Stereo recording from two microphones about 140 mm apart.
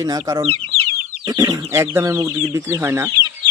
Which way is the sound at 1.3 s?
20° right (ahead or behind).